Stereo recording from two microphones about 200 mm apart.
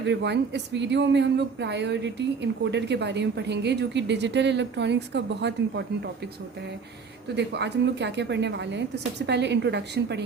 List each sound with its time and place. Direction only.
0.0 s speech: 60° right (ahead or behind)
7.3 s speech: 60° right (ahead or behind)